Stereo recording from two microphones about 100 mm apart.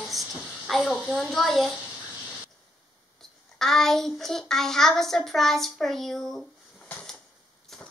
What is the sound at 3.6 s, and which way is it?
A woman's voice, 5° left (ahead or behind).